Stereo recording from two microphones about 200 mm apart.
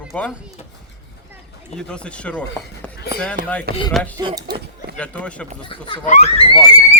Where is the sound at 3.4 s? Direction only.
40° right (ahead or behind).